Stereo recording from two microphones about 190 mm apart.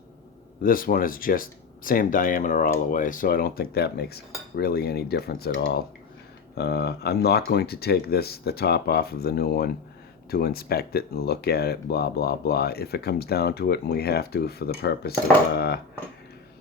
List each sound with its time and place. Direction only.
0.6 s speech: 50° left (ahead or behind)